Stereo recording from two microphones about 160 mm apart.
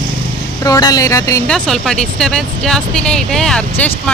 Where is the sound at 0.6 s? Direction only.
20° left (ahead or behind).